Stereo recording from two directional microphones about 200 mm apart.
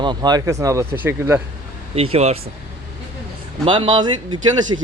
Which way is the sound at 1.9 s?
30° right (ahead or behind).